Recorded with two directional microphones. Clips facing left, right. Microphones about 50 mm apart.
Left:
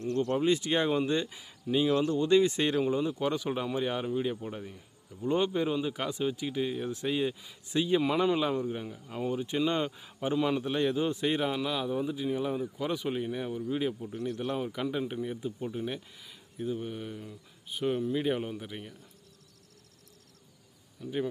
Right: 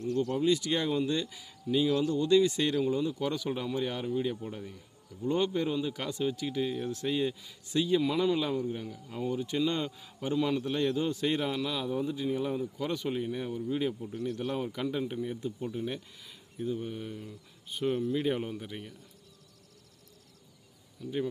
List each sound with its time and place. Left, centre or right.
0.2 s a man's voice: left; by 16.4 s centre
16.6 s speech: left
16.8 s a man's voice: centre
21.0 s a man's voice: centre